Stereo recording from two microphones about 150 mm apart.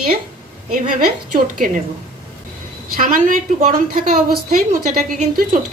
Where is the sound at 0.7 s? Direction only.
65° right (ahead or behind).